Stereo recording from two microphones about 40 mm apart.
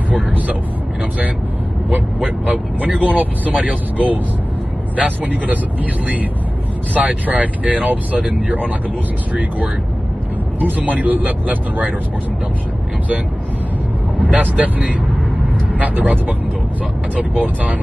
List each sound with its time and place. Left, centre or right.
2.4 s speech: right
6.9 s speech: right
14.1 s speech: right